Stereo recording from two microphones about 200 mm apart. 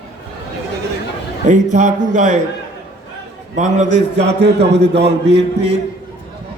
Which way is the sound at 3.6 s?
35° right (ahead or behind).